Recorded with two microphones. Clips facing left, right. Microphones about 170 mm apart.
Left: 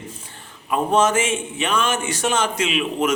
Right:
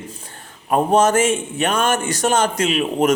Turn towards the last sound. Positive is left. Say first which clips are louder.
# right 4 dB
turn(degrees=-40)  # may be behind; listen again after turning